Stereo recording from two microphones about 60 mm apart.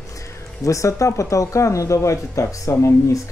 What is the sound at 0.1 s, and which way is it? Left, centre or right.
Speech, left.